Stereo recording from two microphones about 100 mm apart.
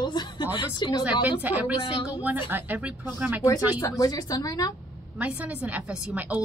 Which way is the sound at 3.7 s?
35° left (ahead or behind).